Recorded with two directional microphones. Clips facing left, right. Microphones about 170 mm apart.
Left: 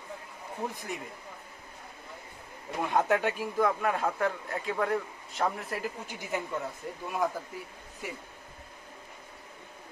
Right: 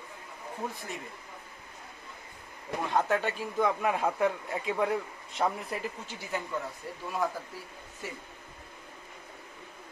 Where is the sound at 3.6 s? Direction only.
5° right (ahead or behind).